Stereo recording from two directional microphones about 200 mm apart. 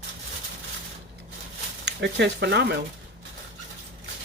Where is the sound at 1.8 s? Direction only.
60° right (ahead or behind).